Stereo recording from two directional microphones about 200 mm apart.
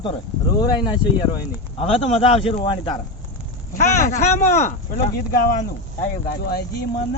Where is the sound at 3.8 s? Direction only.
40° left (ahead or behind).